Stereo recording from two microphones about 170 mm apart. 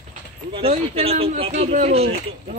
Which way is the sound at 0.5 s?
35° right (ahead or behind).